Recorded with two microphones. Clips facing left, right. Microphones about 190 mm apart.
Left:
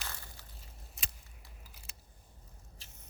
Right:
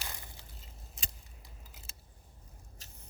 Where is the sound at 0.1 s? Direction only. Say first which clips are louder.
Right 1 dB; 20° right (ahead or behind).